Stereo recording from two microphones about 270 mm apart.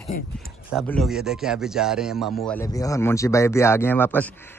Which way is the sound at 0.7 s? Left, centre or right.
Centre.